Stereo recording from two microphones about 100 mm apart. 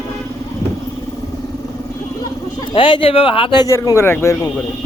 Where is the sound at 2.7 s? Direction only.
60° left (ahead or behind).